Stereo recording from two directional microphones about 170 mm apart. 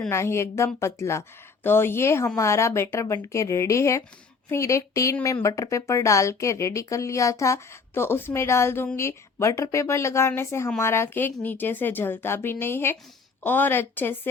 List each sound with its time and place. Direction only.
0.1 s speech: 15° left (ahead or behind)